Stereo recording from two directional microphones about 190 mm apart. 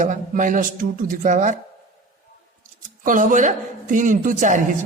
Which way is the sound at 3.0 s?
45° right (ahead or behind).